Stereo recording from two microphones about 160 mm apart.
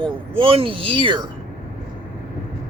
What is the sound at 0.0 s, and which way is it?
Speech, 35° right (ahead or behind).